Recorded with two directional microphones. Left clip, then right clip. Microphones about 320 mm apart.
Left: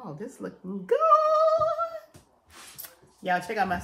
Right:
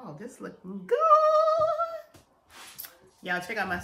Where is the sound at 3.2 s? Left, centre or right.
Centre.